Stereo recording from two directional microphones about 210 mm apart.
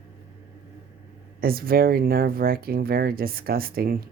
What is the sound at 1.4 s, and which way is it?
Speech, 45° right (ahead or behind).